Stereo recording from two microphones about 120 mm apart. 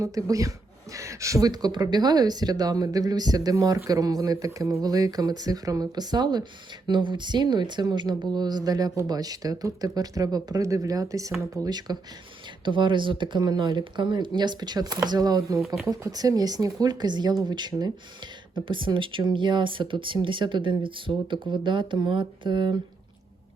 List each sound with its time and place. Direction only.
0.0 s speech: 30° right (ahead or behind)
15.6 s speech: centre (ahead or behind)
15.9 s speech: 30° right (ahead or behind)